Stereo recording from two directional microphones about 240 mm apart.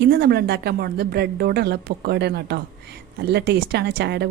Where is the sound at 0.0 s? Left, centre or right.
Right.